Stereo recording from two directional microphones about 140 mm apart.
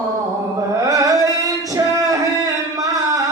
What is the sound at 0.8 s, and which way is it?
Music, 25° right (ahead or behind).